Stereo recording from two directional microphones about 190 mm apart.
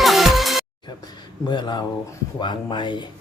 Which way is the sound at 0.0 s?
Centre (ahead or behind).